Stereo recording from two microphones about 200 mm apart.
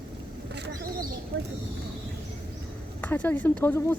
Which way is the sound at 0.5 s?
55° right (ahead or behind).